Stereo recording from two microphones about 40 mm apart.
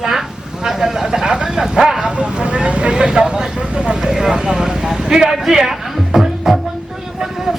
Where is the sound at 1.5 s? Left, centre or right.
Centre.